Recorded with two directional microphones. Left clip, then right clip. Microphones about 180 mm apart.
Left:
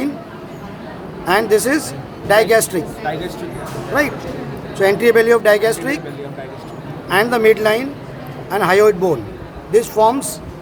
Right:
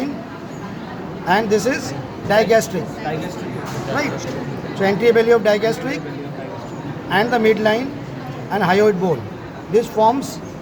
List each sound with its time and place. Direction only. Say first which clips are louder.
1.3 s speech: left 3 dB; 40° left (ahead or behind)
4.8 s speech: left 3 dB; 40° left (ahead or behind)
7.1 s speech: left 3 dB; 45° left (ahead or behind)